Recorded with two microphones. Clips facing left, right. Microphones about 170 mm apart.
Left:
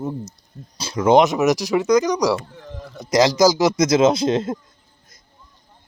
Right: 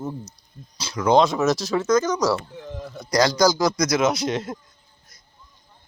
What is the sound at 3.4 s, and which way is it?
Speech, 10° left (ahead or behind).